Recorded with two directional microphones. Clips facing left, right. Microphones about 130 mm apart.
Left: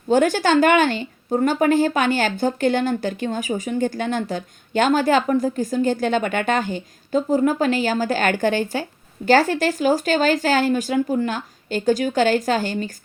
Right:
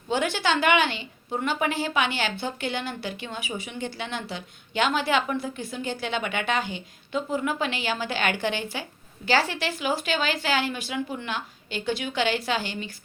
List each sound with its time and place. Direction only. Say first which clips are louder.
0.1 s speech: left 8 dB; 45° left (ahead or behind)